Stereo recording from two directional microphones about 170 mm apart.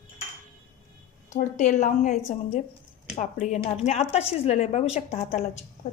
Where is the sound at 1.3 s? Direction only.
45° left (ahead or behind).